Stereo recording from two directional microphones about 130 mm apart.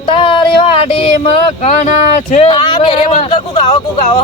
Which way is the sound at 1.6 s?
65° left (ahead or behind).